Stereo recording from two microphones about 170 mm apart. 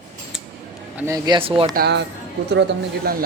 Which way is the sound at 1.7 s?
75° right (ahead or behind).